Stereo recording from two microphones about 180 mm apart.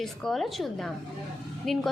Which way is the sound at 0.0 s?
Centre (ahead or behind).